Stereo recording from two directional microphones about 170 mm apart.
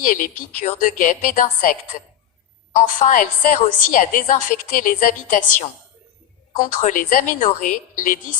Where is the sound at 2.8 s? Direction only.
50° left (ahead or behind).